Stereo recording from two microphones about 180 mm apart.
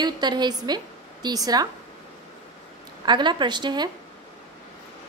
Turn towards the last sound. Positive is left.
turn(degrees=-25)  # may be behind; listen again after turning